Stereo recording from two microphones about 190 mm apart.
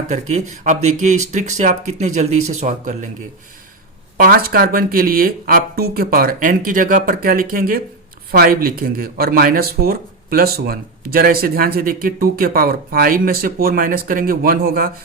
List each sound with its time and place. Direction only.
0.1 s speech: 40° right (ahead or behind)
4.2 s speech: 50° right (ahead or behind)